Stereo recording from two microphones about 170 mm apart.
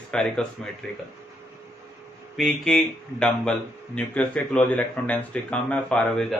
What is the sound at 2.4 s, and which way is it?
Speech, centre (ahead or behind).